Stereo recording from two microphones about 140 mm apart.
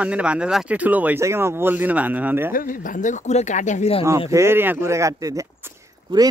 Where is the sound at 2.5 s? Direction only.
75° left (ahead or behind); by 3.9 s 60° left (ahead or behind).